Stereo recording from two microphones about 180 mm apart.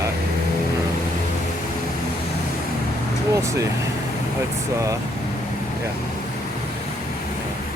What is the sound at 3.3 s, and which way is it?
Speech, 15° right (ahead or behind).